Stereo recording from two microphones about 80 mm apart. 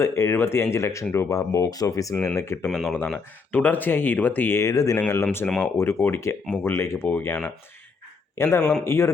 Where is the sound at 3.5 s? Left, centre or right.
Left.